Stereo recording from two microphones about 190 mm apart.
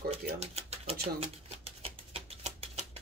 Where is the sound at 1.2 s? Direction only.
30° right (ahead or behind).